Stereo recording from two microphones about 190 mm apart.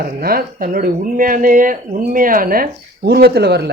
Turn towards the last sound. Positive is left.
turn(degrees=-60)  # may be behind; listen again after turning